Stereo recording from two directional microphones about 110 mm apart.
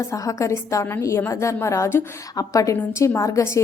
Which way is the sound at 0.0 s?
30° left (ahead or behind).